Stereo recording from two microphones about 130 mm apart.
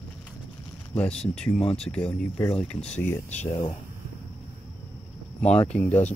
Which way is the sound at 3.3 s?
60° left (ahead or behind).